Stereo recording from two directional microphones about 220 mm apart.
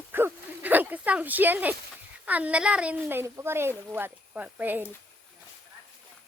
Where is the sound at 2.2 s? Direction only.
5° right (ahead or behind).